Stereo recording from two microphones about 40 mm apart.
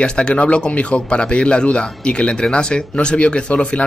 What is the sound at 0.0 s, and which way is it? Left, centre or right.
Speech, left.